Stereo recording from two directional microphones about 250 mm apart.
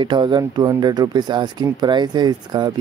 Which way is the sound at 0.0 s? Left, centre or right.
Centre.